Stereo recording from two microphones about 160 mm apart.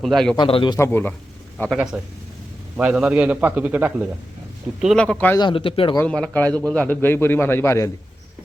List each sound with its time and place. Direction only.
0.0 s speech: centre (ahead or behind)
0.3 s speech: 30° left (ahead or behind)
0.8 s a man's voice: 15° left (ahead or behind)
2.7 s a man's voice: 5° right (ahead or behind)
4.8 s speech: centre (ahead or behind)
5.4 s speech: 30° left (ahead or behind)
6.0 s a man's voice: 5° left (ahead or behind)